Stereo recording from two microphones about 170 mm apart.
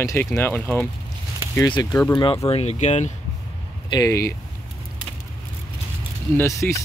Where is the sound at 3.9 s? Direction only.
20° left (ahead or behind).